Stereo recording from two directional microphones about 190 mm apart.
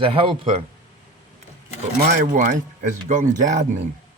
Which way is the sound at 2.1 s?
40° right (ahead or behind).